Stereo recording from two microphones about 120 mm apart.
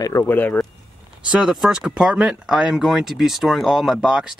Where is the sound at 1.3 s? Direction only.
5° right (ahead or behind).